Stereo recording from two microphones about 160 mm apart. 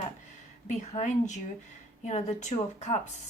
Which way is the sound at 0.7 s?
50° left (ahead or behind).